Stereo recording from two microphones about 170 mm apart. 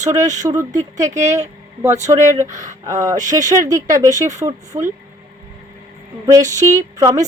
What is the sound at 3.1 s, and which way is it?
Speech, 45° right (ahead or behind).